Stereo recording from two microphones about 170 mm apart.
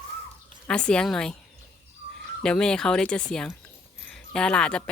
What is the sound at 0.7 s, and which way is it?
Speech, 5° left (ahead or behind).